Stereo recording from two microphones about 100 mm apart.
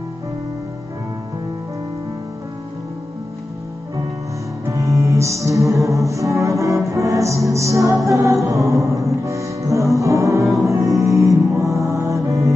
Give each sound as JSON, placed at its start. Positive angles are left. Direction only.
{"t": 4.6, "sound": "music", "side_deg": -30}
{"t": 11.5, "sound": "mantra", "side_deg": -30}